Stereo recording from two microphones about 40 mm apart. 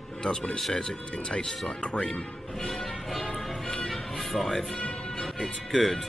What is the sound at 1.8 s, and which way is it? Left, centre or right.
Speech, left.